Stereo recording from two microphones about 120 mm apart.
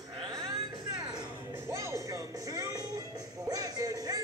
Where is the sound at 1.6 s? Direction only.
25° right (ahead or behind).